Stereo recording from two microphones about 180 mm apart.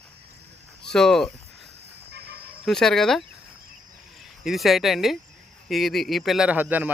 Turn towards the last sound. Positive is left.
turn(degrees=-10)  # may be behind; listen again after turning